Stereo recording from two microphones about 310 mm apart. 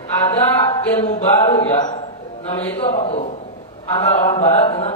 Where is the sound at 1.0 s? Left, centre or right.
Centre.